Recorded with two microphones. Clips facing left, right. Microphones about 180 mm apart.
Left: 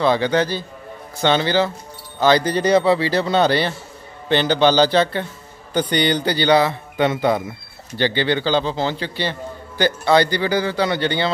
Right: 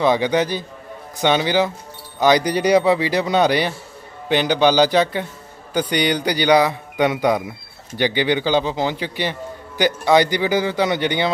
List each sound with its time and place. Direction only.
0.0 s a man's voice: 15° right (ahead or behind)